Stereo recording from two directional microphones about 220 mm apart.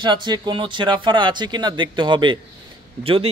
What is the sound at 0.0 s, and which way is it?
A man's voice, 20° right (ahead or behind).